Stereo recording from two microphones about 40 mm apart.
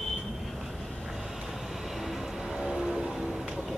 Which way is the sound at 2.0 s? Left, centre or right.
Centre.